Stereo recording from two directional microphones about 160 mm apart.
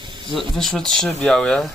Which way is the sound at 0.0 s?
30° right (ahead or behind).